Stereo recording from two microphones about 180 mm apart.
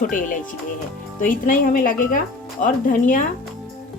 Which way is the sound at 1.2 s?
50° left (ahead or behind).